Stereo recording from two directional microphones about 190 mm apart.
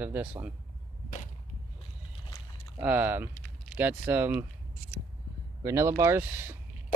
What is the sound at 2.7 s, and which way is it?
Speech, 10° right (ahead or behind).